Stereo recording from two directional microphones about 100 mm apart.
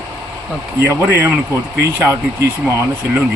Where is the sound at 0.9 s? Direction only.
25° right (ahead or behind).